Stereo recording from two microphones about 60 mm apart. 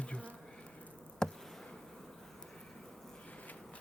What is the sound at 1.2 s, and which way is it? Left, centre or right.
Insect, centre.